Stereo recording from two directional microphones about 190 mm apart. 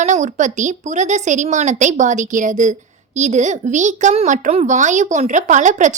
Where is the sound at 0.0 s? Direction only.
40° right (ahead or behind).